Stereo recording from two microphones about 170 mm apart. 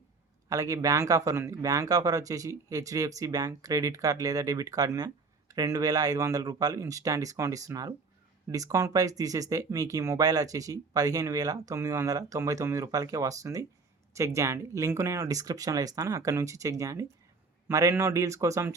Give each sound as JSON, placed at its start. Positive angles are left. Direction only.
{"t": 0.4, "sound": "a man's voice", "side_deg": -20}